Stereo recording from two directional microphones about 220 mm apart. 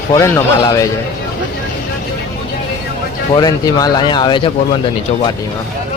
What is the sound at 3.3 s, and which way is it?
Speech, 15° left (ahead or behind).